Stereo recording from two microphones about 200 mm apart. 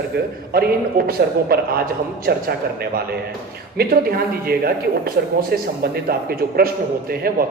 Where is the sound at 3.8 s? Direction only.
50° right (ahead or behind).